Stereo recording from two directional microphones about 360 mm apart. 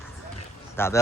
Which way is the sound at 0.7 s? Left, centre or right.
Centre.